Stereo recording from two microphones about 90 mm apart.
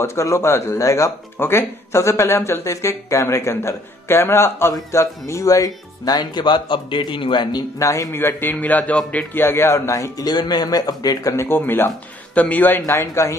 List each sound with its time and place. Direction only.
0.0 s speech: 35° left (ahead or behind); by 7.6 s 60° left (ahead or behind)
7.8 s a man's voice: 35° left (ahead or behind)
11.3 s a man's voice: 25° left (ahead or behind)